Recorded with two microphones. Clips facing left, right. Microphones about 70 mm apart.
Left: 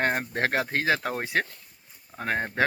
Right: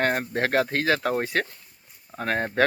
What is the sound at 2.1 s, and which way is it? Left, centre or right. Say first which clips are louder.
Speech: right 3 dB; centre.